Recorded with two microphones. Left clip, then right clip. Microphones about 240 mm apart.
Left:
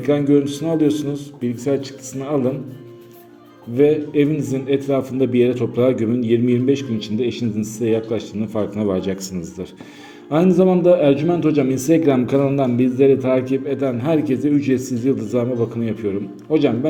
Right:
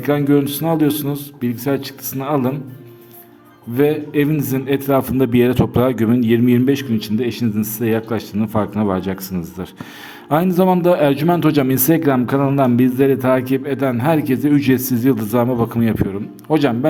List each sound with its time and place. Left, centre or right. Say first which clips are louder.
0.0 s a man's voice: even; right
3.8 s a man's voice: left 1 dB; right
10.2 s a man's voice: even; right